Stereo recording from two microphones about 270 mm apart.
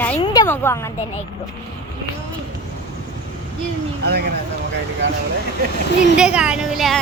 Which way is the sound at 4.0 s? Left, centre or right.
Right.